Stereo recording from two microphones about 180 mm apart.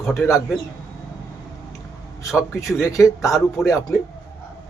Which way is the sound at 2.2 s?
15° left (ahead or behind).